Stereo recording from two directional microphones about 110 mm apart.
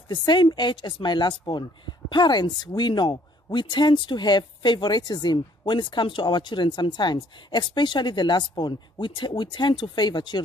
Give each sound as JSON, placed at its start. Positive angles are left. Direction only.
{"t": 0.1, "sound": "speech", "side_deg": 45}